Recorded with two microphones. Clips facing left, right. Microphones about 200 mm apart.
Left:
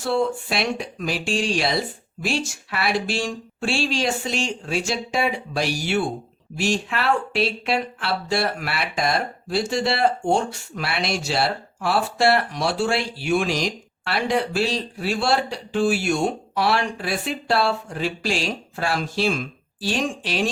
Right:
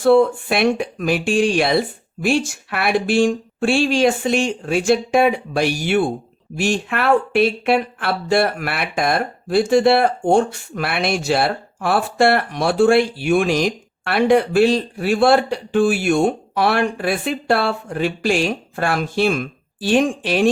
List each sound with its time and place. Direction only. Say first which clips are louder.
0.0 s speech: right 9 dB; 55° right (ahead or behind)